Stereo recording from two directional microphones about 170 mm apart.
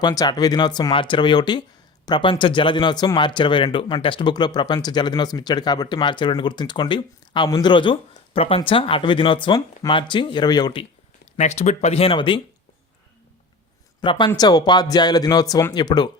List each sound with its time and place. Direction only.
0.0 s speech: 25° left (ahead or behind)
11.3 s speech: 40° left (ahead or behind)
14.0 s speech: 30° left (ahead or behind)